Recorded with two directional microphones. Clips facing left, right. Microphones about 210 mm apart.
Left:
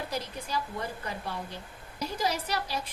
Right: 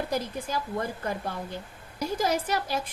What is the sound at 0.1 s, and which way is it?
Speech, 50° right (ahead or behind).